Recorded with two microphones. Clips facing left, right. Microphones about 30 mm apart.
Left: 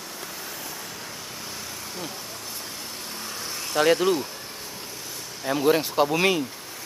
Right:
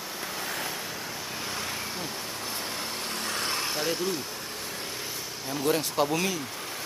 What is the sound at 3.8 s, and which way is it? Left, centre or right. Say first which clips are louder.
Speech: left 13 dB; left.